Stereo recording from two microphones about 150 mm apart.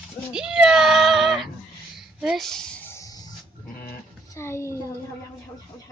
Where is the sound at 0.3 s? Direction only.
5° right (ahead or behind); by 4.7 s 15° left (ahead or behind).